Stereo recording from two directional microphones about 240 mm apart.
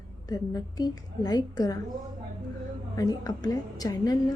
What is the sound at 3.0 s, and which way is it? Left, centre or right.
A woman's voice, centre.